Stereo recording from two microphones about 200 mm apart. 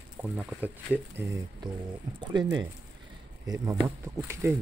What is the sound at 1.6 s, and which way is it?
Speech, 20° right (ahead or behind).